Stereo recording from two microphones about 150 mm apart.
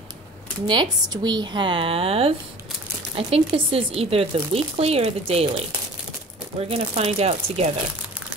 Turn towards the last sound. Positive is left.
turn(degrees=-45)  # may be behind; listen again after turning